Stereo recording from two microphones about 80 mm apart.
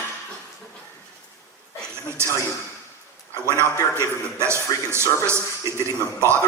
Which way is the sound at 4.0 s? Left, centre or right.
Right.